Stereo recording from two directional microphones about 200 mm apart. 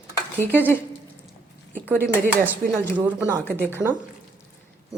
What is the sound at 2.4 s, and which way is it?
A woman's voice, 10° right (ahead or behind).